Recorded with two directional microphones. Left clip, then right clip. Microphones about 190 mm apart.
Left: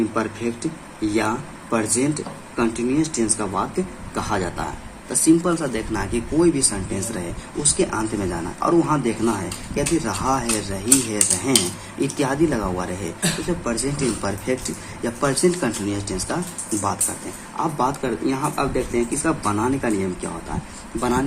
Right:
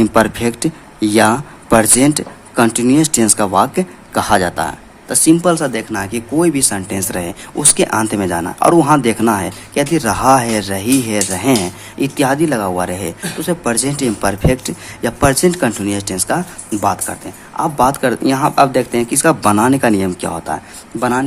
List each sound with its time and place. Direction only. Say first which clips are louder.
0.1 s speech: right 11 dB; 50° right (ahead or behind); by 6.2 s 25° right (ahead or behind)
6.4 s speech: right 4 dB; 35° right (ahead or behind)
17.6 s speech: right 9 dB; 40° right (ahead or behind)
21.0 s speech: right 6 dB; 35° right (ahead or behind)